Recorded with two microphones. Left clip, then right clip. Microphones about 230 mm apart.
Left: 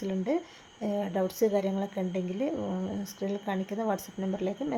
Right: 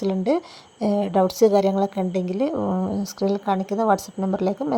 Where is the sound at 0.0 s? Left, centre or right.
Right.